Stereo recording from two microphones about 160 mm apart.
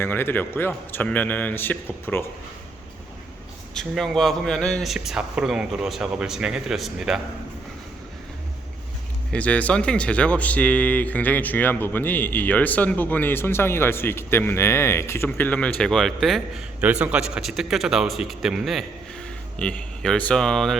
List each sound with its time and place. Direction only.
0.0 s speech: 15° left (ahead or behind)
3.8 s speech: centre (ahead or behind)
9.3 s speech: 10° left (ahead or behind)